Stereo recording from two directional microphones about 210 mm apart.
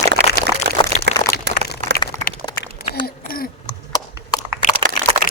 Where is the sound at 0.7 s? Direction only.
55° right (ahead or behind).